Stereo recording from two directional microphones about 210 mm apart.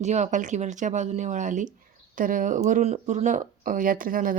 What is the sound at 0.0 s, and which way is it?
Speech, 35° right (ahead or behind).